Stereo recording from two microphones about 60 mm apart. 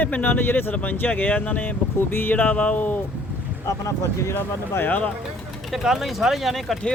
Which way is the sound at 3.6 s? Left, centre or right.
Left.